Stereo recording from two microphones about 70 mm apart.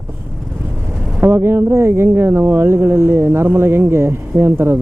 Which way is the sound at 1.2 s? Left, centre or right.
Right.